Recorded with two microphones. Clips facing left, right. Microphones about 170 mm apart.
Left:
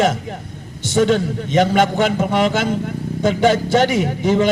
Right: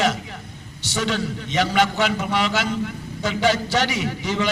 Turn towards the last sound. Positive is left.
turn(degrees=50)  # may be behind; listen again after turning